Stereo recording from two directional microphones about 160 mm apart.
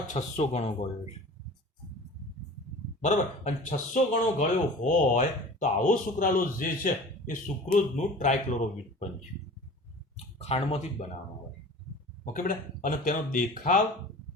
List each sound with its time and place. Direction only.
0.1 s speech: 45° left (ahead or behind)
3.0 s speech: 45° left (ahead or behind)
10.3 s speech: 40° left (ahead or behind)
12.2 s speech: 55° left (ahead or behind)